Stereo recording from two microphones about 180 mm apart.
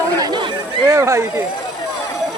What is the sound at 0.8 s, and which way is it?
Speech, 15° right (ahead or behind).